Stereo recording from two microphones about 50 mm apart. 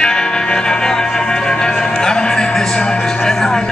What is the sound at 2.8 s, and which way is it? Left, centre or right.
Speech, centre.